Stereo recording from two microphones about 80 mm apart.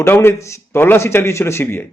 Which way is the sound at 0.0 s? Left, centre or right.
Left.